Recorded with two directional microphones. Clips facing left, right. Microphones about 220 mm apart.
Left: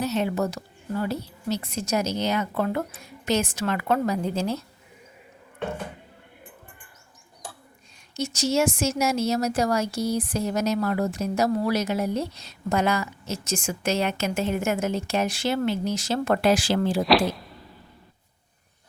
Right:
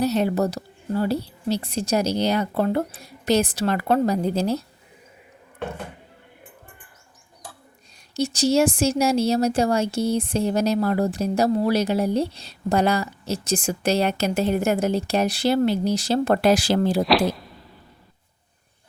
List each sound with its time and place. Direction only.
0.0 s speech: 35° right (ahead or behind)
8.1 s speech: 35° right (ahead or behind)
17.0 s speech: centre (ahead or behind)